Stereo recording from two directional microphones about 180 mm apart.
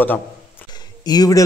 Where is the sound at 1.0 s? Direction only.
20° left (ahead or behind).